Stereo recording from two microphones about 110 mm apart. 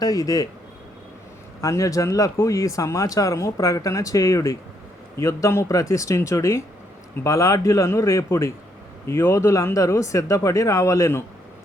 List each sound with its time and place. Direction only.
0.0 s speech: 35° left (ahead or behind)
1.6 s speech: 30° left (ahead or behind)